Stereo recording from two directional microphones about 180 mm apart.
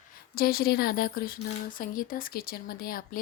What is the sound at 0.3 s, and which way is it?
Speech, 55° left (ahead or behind).